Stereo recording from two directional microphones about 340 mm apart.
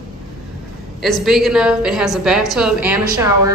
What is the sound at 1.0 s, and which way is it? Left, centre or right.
A woman's voice, centre.